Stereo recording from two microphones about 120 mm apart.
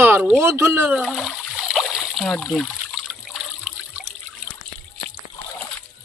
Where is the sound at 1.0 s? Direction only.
Centre (ahead or behind).